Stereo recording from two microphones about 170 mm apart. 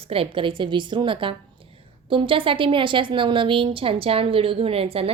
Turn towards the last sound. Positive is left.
turn(degrees=-35)  # may be behind; listen again after turning